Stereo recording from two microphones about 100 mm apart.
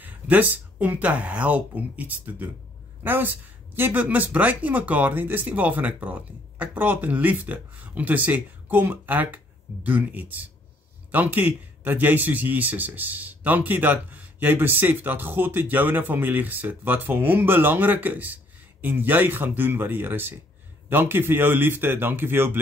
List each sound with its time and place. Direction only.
0.0 s a man's voice: 15° right (ahead or behind)